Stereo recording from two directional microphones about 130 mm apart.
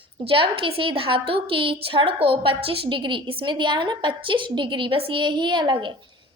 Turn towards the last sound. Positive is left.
turn(degrees=-35)  # may be behind; listen again after turning